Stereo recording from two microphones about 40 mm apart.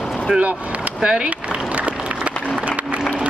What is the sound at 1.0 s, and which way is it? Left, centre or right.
Speech, right.